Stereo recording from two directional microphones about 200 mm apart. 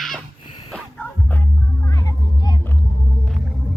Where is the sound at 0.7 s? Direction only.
10° left (ahead or behind).